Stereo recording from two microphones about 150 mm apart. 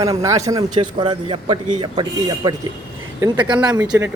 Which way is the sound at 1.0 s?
35° right (ahead or behind).